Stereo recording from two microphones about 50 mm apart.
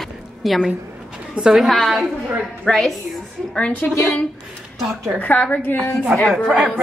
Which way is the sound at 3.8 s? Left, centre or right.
Left.